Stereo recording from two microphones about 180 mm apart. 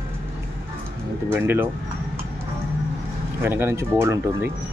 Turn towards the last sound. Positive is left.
turn(degrees=-15)  # may be behind; listen again after turning